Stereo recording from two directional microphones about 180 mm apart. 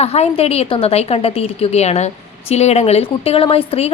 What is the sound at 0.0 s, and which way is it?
A woman's voice, 35° left (ahead or behind).